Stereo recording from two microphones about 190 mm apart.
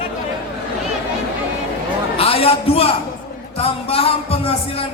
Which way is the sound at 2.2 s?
30° left (ahead or behind).